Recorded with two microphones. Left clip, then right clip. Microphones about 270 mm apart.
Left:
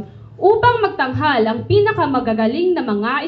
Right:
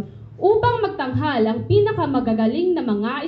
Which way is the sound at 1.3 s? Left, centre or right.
Centre.